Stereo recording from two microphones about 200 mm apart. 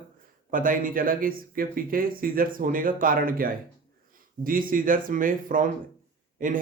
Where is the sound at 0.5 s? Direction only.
45° right (ahead or behind).